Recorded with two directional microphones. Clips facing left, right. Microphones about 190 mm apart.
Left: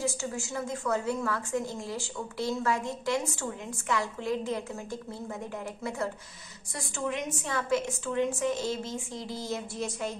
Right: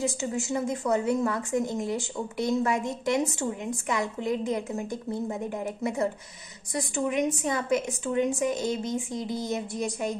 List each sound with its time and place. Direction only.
0.0 s a woman's voice: 20° right (ahead or behind)